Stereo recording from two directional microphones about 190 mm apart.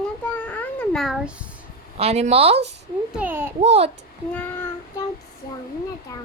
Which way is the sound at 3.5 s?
30° right (ahead or behind).